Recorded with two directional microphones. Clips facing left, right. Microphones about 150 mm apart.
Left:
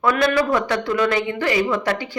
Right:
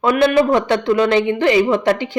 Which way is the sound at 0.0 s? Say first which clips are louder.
Right 5 dB; 20° right (ahead or behind).